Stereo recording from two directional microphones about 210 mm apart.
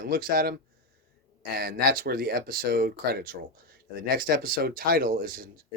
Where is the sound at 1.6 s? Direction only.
45° right (ahead or behind).